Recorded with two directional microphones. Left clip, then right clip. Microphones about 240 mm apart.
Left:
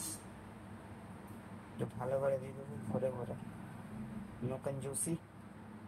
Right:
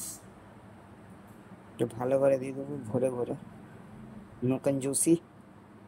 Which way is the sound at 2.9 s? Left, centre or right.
Right.